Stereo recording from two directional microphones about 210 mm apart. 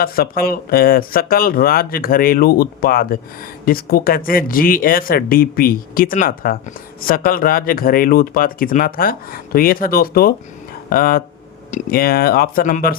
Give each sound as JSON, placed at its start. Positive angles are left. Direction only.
{"t": 0.0, "sound": "speech", "side_deg": 45}